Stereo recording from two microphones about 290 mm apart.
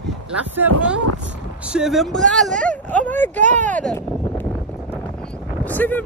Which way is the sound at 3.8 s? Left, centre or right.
Centre.